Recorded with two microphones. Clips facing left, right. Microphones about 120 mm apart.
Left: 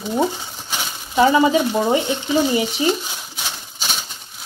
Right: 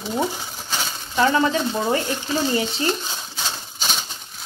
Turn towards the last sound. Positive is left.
turn(degrees=5)  # may be behind; listen again after turning